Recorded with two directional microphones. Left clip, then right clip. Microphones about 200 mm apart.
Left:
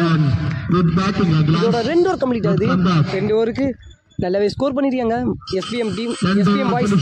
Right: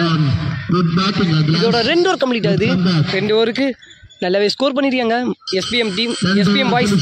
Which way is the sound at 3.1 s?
5° left (ahead or behind).